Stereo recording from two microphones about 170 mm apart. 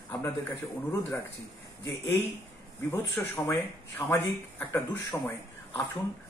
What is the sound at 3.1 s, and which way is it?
Speech, 10° left (ahead or behind).